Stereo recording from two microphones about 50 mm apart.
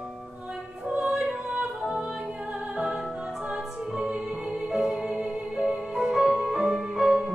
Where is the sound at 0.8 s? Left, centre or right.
Centre.